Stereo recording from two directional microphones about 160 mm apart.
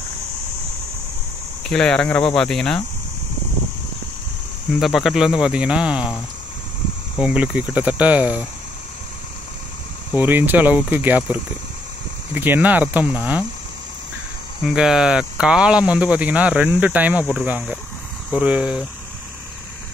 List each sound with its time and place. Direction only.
1.6 s speech: 5° left (ahead or behind)
4.7 s speech: centre (ahead or behind)
7.2 s speech: 5° right (ahead or behind)
10.1 s speech: 10° right (ahead or behind)
12.4 s speech: 10° right (ahead or behind)
14.7 s speech: 5° right (ahead or behind)